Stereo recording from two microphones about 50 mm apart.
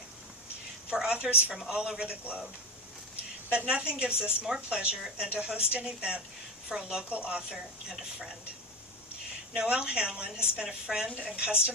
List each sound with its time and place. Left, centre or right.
0.9 s a sound: centre
1.1 s a woman's voice: right
3.5 s a woman's voice: right
9.6 s a woman's voice: centre